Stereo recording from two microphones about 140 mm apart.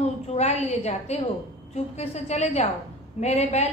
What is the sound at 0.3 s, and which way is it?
A woman's voice, 50° left (ahead or behind).